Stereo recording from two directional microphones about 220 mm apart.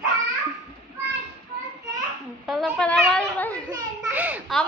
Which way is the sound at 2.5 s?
Centre (ahead or behind).